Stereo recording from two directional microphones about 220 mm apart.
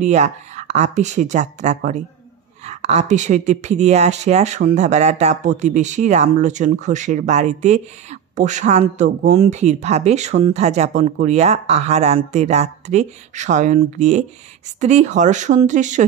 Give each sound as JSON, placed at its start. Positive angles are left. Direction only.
{"t": 0.0, "sound": "speech", "side_deg": -35}